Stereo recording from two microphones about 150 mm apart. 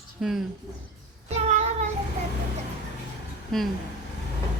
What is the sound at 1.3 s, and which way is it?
Child singing, 50° right (ahead or behind).